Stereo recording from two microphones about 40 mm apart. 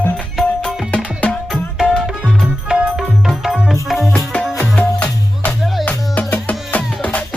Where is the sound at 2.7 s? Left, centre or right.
Right.